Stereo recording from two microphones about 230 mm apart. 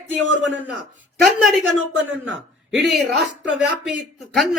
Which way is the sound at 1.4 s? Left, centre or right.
Centre.